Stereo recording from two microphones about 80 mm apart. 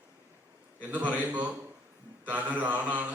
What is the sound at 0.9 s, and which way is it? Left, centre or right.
A man's voice, centre.